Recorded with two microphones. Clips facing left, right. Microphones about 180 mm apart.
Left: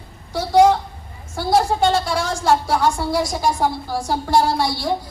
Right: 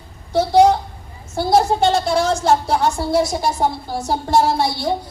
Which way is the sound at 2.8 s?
25° right (ahead or behind).